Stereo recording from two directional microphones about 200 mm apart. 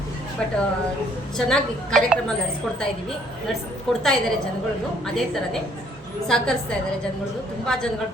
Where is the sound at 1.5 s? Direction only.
Centre (ahead or behind).